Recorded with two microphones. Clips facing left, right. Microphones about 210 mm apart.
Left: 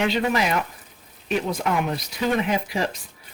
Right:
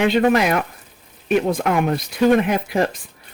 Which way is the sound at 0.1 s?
55° right (ahead or behind).